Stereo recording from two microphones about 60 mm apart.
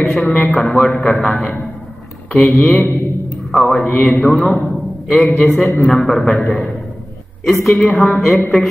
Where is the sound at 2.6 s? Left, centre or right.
Left.